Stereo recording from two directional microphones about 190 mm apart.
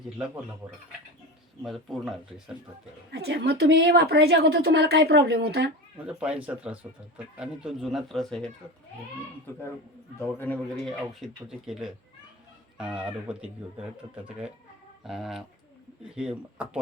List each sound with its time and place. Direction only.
1.6 s speech: centre (ahead or behind)
3.1 s a woman's voice: 60° right (ahead or behind)
6.1 s speech: 5° right (ahead or behind)
10.2 s speech: 10° left (ahead or behind); by 16.8 s 5° right (ahead or behind)